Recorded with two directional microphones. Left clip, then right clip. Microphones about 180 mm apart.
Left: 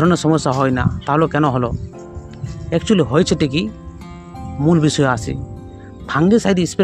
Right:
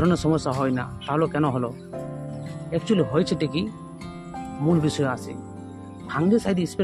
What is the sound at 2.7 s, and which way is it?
Speech, 40° left (ahead or behind).